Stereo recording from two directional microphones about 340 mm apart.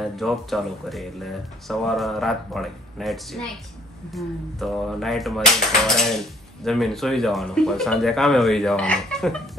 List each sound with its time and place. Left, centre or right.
0.0 s speech: centre